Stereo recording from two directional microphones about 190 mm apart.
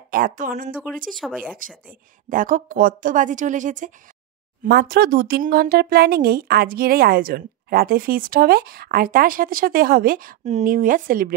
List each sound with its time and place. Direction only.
0.1 s speech: 45° right (ahead or behind)
1.1 s speech: 5° left (ahead or behind)
1.9 s speech: 45° right (ahead or behind)
4.6 s speech: 55° right (ahead or behind)